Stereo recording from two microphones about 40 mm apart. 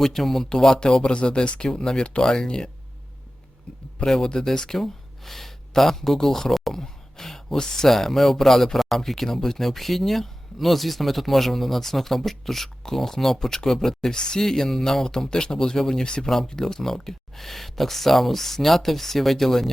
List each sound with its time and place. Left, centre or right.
0.0 s speech: centre
4.0 s speech: centre